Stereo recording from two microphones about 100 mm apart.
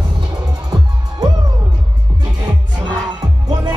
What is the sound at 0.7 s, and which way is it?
Music, 40° right (ahead or behind).